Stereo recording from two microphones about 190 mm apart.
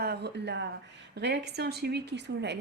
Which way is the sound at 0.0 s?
60° right (ahead or behind).